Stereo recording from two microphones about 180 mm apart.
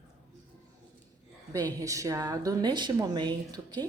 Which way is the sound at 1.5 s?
20° right (ahead or behind).